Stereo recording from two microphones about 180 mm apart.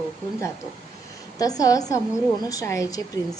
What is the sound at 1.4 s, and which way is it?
A woman's voice, 20° left (ahead or behind).